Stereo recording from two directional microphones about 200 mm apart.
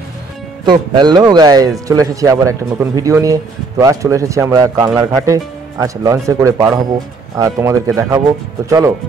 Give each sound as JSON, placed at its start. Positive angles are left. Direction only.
{"t": 0.7, "sound": "speech", "side_deg": -20}